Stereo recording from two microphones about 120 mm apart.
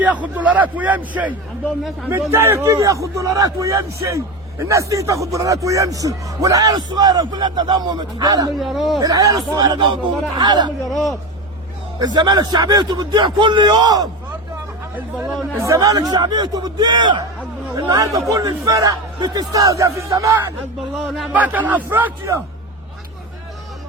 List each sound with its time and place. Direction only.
0.0 s a man's voice: 10° right (ahead or behind)
2.3 s a man's voice: 20° right (ahead or behind)
8.5 s speech: centre (ahead or behind)
9.0 s a man's voice: 30° right (ahead or behind)
11.9 s a man's voice: 35° right (ahead or behind)
15.6 s a man's voice: 30° right (ahead or behind)
21.3 s a man's voice: 15° right (ahead or behind)